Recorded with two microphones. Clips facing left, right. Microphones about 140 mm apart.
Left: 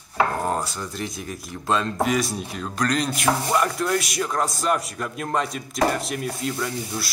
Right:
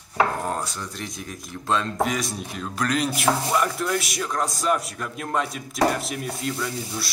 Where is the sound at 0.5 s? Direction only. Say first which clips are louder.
Left 3 dB; 5° left (ahead or behind).